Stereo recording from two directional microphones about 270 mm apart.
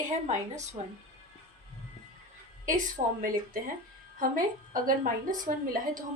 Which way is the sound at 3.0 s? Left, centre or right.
Right.